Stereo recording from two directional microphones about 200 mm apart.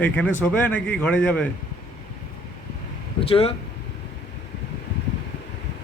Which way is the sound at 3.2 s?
30° left (ahead or behind).